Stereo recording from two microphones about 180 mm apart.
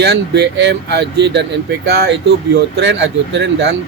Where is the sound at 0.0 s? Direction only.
70° right (ahead or behind).